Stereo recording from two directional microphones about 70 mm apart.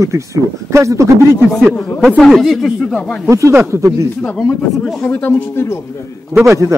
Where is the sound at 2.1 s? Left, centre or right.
Centre.